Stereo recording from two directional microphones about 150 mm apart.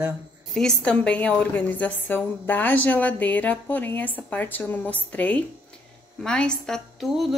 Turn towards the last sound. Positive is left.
turn(degrees=0)  # may be behind; listen again after turning